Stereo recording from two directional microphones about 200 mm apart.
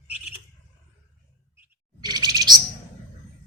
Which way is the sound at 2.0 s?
20° right (ahead or behind).